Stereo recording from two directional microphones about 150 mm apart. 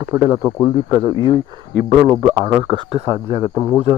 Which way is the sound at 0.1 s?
20° right (ahead or behind).